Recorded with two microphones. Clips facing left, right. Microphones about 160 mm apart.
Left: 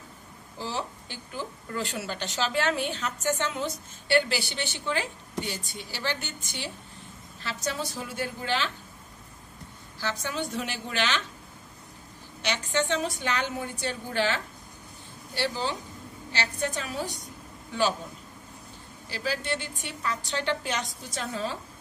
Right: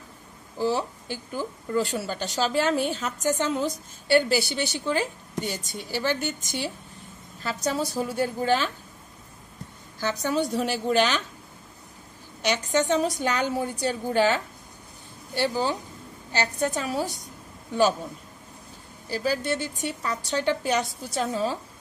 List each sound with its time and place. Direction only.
0.6 s a woman's voice: 45° right (ahead or behind)
10.2 s a woman's voice: 40° right (ahead or behind)
12.4 s a woman's voice: 45° right (ahead or behind)
19.0 s a woman's voice: 45° right (ahead or behind)